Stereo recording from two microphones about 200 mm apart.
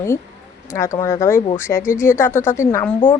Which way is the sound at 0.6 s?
15° left (ahead or behind).